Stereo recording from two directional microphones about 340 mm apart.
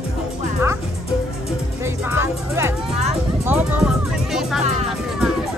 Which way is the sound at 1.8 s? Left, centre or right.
Centre.